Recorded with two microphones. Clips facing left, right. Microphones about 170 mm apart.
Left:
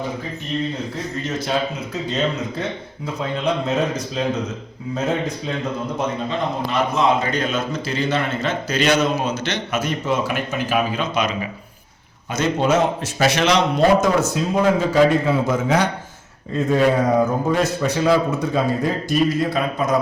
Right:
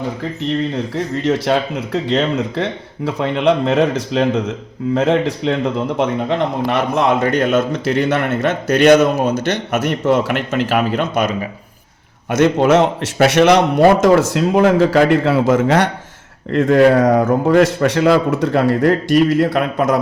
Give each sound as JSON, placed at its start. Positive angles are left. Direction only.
{"t": 1.1, "sound": "a man's voice", "side_deg": -75}
{"t": 6.0, "sound": "a man's voice", "side_deg": -70}
{"t": 8.7, "sound": "a man's voice", "side_deg": -60}
{"t": 12.3, "sound": "a man's voice", "side_deg": -75}
{"t": 17.2, "sound": "a man's voice", "side_deg": -65}